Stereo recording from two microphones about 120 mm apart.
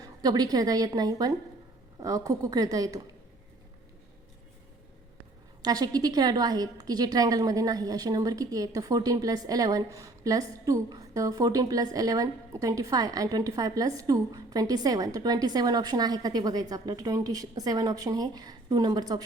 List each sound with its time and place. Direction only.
0.0 s a woman's voice: 30° right (ahead or behind)
5.6 s a woman's voice: 35° right (ahead or behind)